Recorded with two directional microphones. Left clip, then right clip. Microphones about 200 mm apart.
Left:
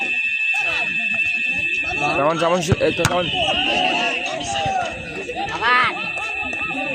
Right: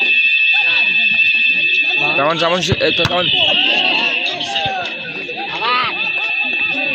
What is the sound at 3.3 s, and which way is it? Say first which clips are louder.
Run: right 6 dB; 35° left (ahead or behind).